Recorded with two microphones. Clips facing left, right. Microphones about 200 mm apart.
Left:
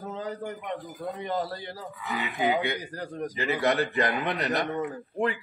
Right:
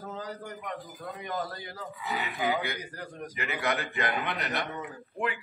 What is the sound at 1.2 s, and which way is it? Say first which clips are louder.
Speech: left 3 dB; 35° left (ahead or behind).